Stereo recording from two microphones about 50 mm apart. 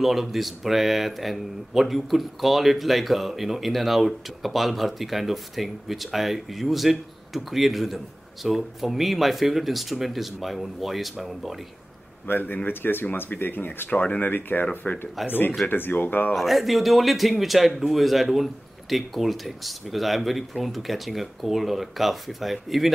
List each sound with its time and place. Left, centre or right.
0.0 s speech: centre
12.3 s speech: left
16.3 s speech: centre